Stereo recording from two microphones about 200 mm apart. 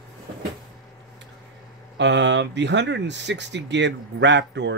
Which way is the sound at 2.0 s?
65° right (ahead or behind).